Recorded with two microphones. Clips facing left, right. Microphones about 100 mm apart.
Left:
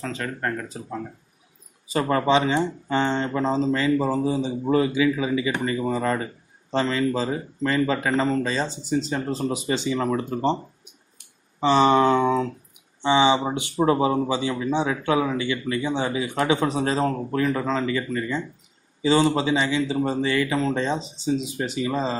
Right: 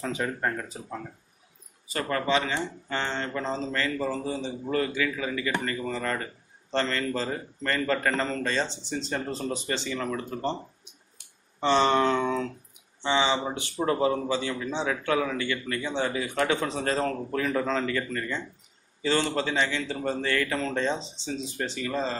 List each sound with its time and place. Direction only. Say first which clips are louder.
0.0 s speech: even; 10° right (ahead or behind)
1.9 s speech: left 6 dB; 20° left (ahead or behind); by 9.6 s 5° left (ahead or behind)
9.7 s speech: left 7 dB; 15° left (ahead or behind)
9.9 s speech: left 7 dB; 25° left (ahead or behind)
11.6 s speech: left 5 dB; 5° left (ahead or behind)